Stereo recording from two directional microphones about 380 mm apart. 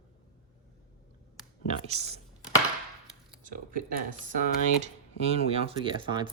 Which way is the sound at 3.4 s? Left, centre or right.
Right.